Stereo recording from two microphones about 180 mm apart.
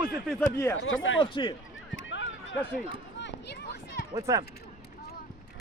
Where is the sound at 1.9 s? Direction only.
90° left.